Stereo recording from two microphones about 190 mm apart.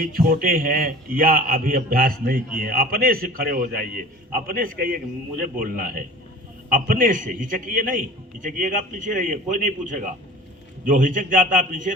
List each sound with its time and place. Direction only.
0.0 s a man's voice: 50° right (ahead or behind)